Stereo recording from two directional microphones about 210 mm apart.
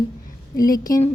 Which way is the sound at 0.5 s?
45° left (ahead or behind).